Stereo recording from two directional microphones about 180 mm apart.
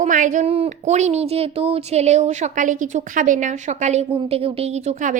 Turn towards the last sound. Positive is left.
turn(degrees=-35)  # may be behind; listen again after turning